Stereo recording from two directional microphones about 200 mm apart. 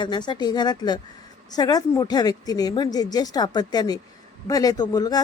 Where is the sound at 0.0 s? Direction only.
20° left (ahead or behind).